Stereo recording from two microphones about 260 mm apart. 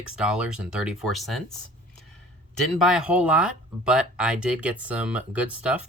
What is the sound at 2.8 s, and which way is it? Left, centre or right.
Speech, centre.